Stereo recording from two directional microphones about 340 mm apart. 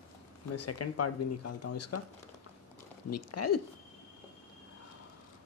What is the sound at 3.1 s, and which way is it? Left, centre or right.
Speech, left.